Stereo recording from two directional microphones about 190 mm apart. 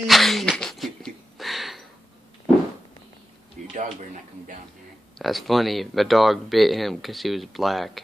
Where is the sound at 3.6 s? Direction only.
40° right (ahead or behind).